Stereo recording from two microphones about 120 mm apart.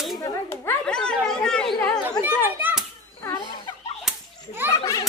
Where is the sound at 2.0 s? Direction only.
15° right (ahead or behind).